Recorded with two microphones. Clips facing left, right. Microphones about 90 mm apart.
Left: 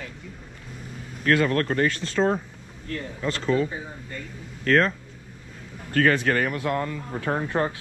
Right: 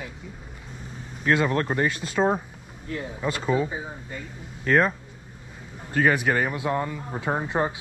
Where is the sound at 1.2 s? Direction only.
15° right (ahead or behind).